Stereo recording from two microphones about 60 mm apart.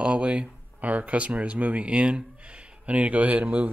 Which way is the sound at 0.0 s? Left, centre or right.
Centre.